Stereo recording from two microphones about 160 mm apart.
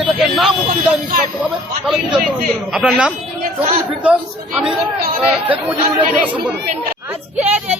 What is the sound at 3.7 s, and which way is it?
Speech, 40° right (ahead or behind).